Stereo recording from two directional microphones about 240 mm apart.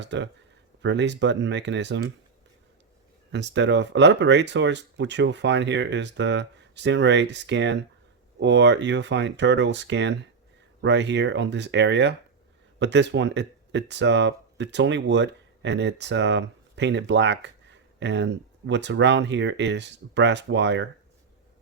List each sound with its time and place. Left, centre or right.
0.0 s speech: right
3.3 s speech: right